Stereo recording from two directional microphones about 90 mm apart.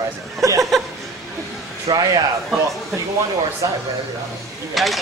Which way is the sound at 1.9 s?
60° right (ahead or behind).